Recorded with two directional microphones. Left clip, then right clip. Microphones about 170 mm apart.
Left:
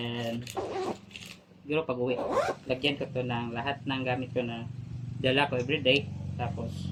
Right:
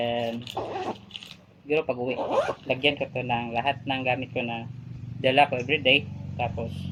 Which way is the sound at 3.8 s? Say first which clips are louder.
Right 5 dB; 20° left (ahead or behind).